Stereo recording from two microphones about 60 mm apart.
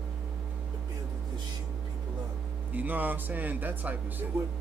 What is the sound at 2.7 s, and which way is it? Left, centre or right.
Speech, right.